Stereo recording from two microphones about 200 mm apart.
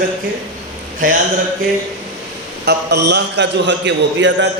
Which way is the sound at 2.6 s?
55° right (ahead or behind).